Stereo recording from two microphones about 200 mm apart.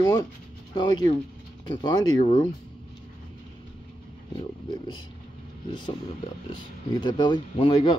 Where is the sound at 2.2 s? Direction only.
35° left (ahead or behind).